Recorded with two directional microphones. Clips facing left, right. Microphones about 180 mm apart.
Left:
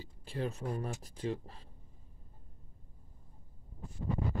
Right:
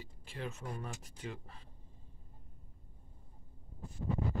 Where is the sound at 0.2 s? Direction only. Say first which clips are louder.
Left 6 dB; 35° left (ahead or behind).